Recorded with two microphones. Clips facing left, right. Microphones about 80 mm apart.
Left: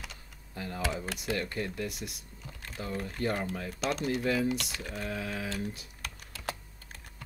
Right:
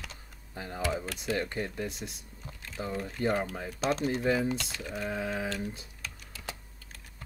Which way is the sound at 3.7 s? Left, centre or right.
Right.